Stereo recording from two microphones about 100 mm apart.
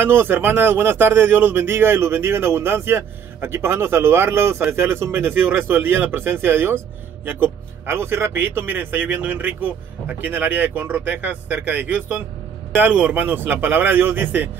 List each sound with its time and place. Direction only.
0.0 s speech: 25° right (ahead or behind)